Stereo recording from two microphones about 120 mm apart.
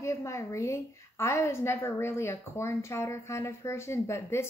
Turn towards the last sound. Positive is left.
turn(degrees=20)  # may be behind; listen again after turning